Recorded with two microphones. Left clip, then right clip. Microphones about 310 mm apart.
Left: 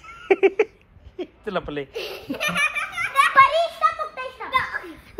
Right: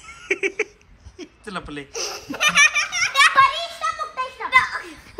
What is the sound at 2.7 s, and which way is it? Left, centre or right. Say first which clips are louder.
Baby laughter: right 5 dB; right.